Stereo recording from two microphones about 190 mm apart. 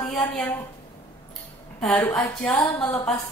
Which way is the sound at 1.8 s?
10° left (ahead or behind).